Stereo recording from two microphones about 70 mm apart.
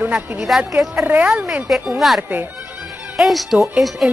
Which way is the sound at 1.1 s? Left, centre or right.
Centre.